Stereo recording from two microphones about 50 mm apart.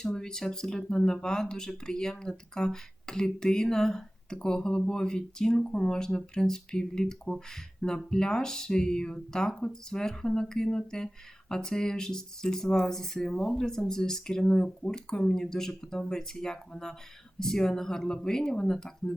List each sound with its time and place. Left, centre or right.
0.0 s speech: centre